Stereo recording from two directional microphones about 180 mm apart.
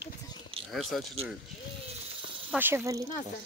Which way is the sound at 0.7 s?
Centre (ahead or behind).